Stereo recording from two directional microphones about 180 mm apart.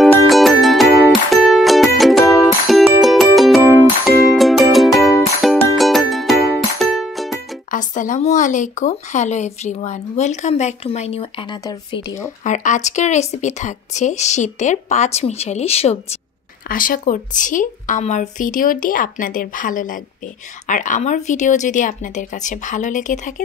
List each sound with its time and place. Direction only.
0.0 s music: centre (ahead or behind)
7.7 s speech: 45° left (ahead or behind)
11.6 s speech: 20° left (ahead or behind)
12.4 s speech: 45° left (ahead or behind)
16.6 s speech: 50° left (ahead or behind)